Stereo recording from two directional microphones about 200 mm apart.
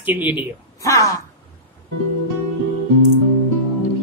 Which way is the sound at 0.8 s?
15° left (ahead or behind).